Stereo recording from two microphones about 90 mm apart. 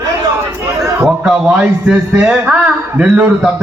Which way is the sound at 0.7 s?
35° right (ahead or behind).